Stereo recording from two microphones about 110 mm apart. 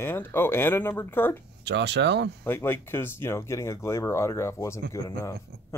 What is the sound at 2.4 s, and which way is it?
Speech, 20° left (ahead or behind).